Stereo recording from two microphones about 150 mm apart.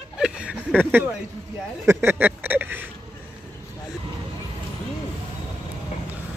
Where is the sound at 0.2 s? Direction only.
5° right (ahead or behind).